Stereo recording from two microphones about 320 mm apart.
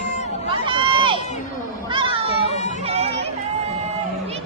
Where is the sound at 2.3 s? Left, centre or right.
Left.